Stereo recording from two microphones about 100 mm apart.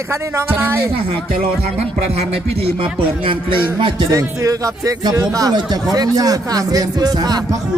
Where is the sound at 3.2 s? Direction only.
55° right (ahead or behind).